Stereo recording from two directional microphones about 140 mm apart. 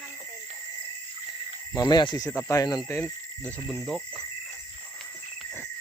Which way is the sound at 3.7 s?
5° right (ahead or behind).